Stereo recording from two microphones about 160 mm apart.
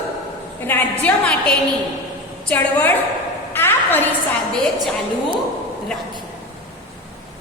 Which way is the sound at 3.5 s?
15° left (ahead or behind).